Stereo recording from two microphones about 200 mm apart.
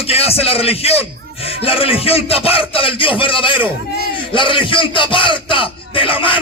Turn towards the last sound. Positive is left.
turn(degrees=25)  # may be behind; listen again after turning